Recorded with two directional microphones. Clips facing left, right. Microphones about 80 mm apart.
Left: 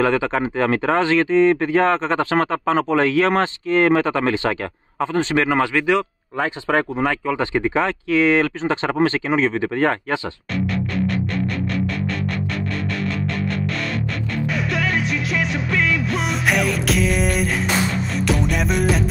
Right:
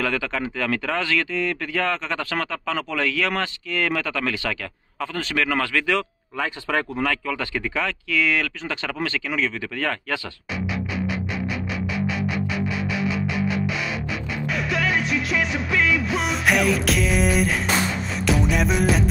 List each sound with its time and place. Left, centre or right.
0.0 s speech: left
14.5 s music: centre